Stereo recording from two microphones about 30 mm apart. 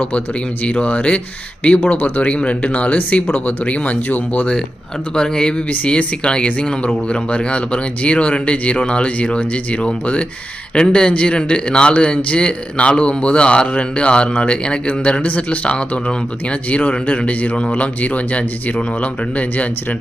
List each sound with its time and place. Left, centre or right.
0.6 s speech: left
2.0 s speech: left
2.2 s speech: left
5.1 s speech: left
5.5 s speech: left
6.2 s speech: left
14.8 s speech: left
16.8 s speech: left